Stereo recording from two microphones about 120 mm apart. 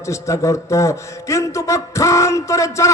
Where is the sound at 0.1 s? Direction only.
25° left (ahead or behind).